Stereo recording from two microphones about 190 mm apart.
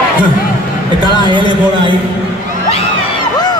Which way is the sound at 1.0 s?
25° right (ahead or behind).